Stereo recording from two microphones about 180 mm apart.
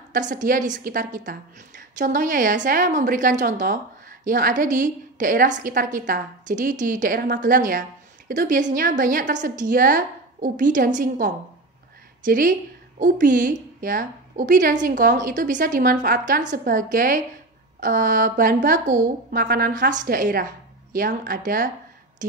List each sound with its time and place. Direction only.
0.1 s a woman's voice: 45° right (ahead or behind)